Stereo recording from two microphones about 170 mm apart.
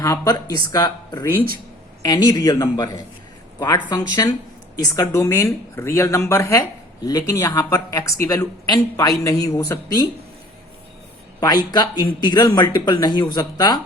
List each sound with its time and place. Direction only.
0.0 s speech: 20° left (ahead or behind)
11.3 s speech: 25° left (ahead or behind)